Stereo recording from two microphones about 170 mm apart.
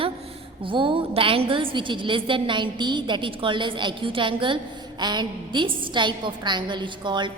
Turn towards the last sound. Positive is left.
turn(degrees=-30)  # may be behind; listen again after turning